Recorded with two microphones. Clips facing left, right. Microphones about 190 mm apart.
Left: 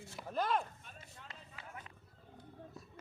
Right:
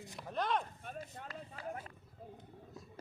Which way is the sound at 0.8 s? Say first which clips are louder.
Right 10 dB; 50° right (ahead or behind).